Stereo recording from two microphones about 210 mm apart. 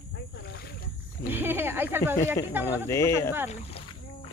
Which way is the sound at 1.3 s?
10° right (ahead or behind).